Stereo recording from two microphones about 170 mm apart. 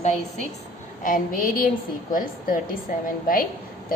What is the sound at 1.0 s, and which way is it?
A woman's voice, 55° left (ahead or behind).